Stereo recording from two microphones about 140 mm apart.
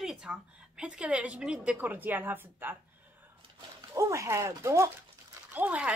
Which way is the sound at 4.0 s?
20° right (ahead or behind).